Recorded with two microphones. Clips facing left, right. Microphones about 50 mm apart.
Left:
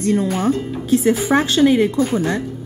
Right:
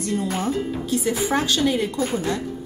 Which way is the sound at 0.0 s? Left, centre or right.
Left.